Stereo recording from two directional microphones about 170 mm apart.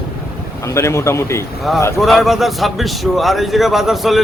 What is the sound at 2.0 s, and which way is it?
A man's voice, centre (ahead or behind).